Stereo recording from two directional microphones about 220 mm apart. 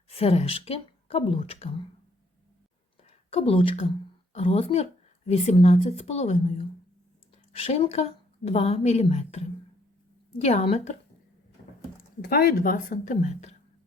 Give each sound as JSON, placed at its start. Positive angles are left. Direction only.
{"t": 0.1, "sound": "a woman's voice", "side_deg": 25}
{"t": 3.0, "sound": "a woman's voice", "side_deg": 25}
{"t": 12.2, "sound": "a woman's voice", "side_deg": 45}